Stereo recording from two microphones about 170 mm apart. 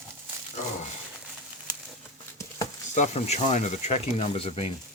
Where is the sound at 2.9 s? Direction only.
40° left (ahead or behind).